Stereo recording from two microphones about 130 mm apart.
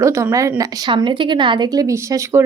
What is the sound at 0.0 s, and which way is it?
A woman's voice, 25° right (ahead or behind).